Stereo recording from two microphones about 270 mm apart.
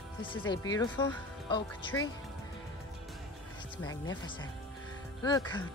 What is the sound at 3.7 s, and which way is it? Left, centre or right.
Speech, centre.